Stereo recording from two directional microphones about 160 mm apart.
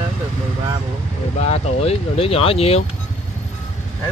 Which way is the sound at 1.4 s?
40° left (ahead or behind).